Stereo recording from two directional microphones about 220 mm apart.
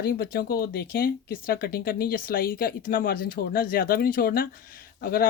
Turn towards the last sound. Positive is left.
turn(degrees=40)  # may be behind; listen again after turning